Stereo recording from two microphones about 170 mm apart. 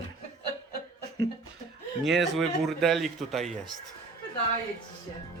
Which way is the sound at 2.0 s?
Centre (ahead or behind).